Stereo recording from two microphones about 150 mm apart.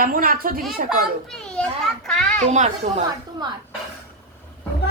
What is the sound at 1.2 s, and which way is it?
A child's voice, 5° left (ahead or behind).